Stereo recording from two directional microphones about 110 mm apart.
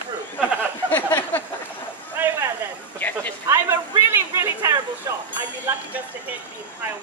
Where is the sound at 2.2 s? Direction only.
20° right (ahead or behind).